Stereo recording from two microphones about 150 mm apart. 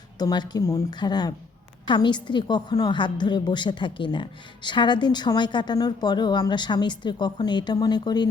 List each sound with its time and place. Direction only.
0.2 s a woman's voice: 25° left (ahead or behind)